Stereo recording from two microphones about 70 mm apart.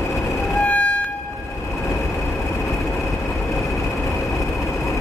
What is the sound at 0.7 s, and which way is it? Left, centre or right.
Music, centre.